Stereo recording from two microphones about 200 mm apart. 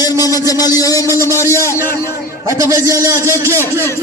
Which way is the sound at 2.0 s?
15° right (ahead or behind).